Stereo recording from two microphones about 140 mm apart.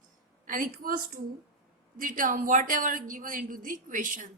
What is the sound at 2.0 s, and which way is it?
A woman's voice, 70° right (ahead or behind).